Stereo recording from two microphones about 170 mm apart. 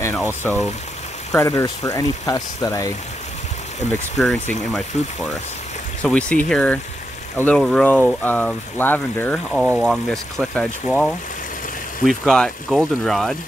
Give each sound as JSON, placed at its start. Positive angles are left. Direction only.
{"t": 0.2, "sound": "speech", "side_deg": 15}
{"t": 4.2, "sound": "speech", "side_deg": 5}
{"t": 6.0, "sound": "speech", "side_deg": 5}